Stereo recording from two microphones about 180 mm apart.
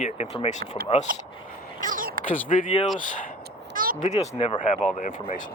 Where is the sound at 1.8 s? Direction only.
50° right (ahead or behind).